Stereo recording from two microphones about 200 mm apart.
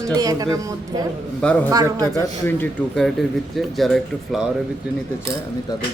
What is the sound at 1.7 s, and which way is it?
Speech, 20° right (ahead or behind).